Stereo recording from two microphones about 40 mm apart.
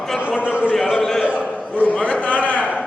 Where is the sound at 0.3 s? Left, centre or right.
Right.